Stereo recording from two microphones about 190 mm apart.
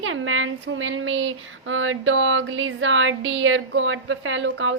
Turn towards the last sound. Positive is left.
turn(degrees=-85)